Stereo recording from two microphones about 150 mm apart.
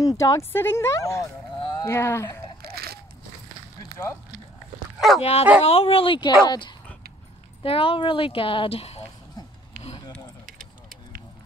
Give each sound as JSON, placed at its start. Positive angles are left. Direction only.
{"t": 0.2, "sound": "speech", "side_deg": 20}
{"t": 2.6, "sound": "a sound", "side_deg": -90}
{"t": 4.9, "sound": "dog", "side_deg": 0}
{"t": 5.2, "sound": "speech", "side_deg": 40}